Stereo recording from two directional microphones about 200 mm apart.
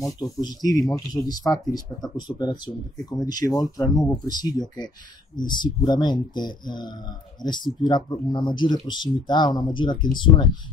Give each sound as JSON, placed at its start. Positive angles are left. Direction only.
{"t": 0.0, "sound": "speech", "side_deg": 20}